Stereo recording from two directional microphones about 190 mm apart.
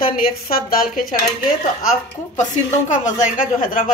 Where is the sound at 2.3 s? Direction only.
40° left (ahead or behind).